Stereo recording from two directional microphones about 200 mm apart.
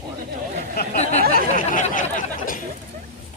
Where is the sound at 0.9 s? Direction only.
35° left (ahead or behind).